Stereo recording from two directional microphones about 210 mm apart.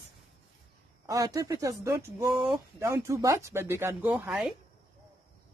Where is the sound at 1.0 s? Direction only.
15° right (ahead or behind).